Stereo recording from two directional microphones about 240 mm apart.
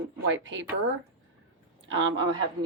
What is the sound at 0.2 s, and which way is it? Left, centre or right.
Speech, right.